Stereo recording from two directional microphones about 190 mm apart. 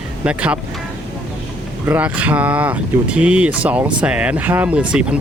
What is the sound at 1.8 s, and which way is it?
Speech, 10° right (ahead or behind).